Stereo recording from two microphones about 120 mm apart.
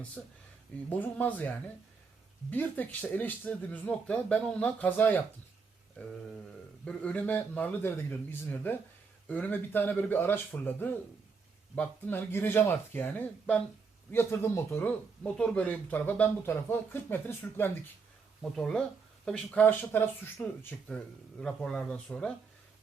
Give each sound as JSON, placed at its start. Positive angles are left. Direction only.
{"t": 0.2, "sound": "speech", "side_deg": 0}
{"t": 0.9, "sound": "speech", "side_deg": 15}
{"t": 6.8, "sound": "speech", "side_deg": 10}
{"t": 18.5, "sound": "speech", "side_deg": 5}
{"t": 21.4, "sound": "speech", "side_deg": 5}